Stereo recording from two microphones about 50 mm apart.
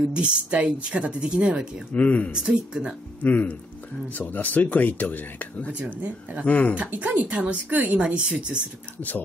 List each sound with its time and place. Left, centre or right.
0.1 s speech: right
2.0 s speech: left
2.3 s speech: centre
3.2 s speech: left
6.8 s a woman's voice: right